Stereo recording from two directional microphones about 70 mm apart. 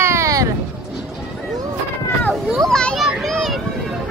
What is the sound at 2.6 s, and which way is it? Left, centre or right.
Children playing, centre.